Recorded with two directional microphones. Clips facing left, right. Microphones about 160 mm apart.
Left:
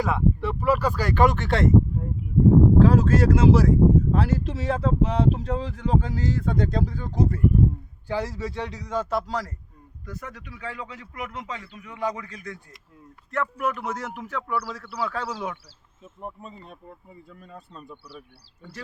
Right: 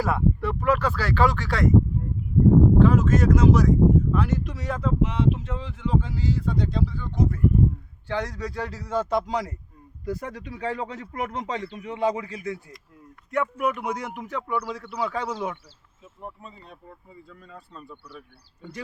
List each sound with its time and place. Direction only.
0.0 s speech: centre (ahead or behind); by 1.7 s 25° left (ahead or behind)
2.7 s speech: 35° left (ahead or behind)
8.0 s speech: 10° left (ahead or behind); by 9.0 s 10° right (ahead or behind)
9.0 s speech: 5° left (ahead or behind)
10.1 s speech: 35° right (ahead or behind)
13.3 s speech: 10° right (ahead or behind)
16.2 s speech: 20° left (ahead or behind)